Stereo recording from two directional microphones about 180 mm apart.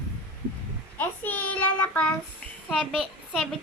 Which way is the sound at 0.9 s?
10° left (ahead or behind).